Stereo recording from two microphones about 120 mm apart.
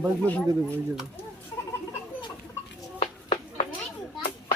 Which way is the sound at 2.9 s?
65° left (ahead or behind).